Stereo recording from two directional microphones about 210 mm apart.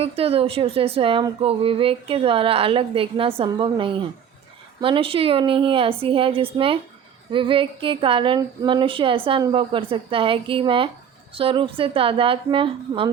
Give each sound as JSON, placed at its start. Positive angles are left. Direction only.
{"t": 0.0, "sound": "speech", "side_deg": -30}